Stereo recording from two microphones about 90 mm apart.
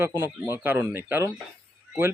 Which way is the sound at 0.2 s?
25° right (ahead or behind).